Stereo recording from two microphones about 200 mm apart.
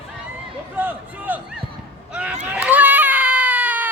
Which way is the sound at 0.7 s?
10° right (ahead or behind).